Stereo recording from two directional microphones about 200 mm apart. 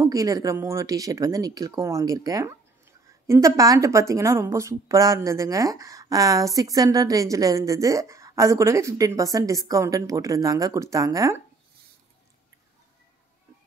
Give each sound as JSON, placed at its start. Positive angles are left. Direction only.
{"t": 0.0, "sound": "a woman's voice", "side_deg": -15}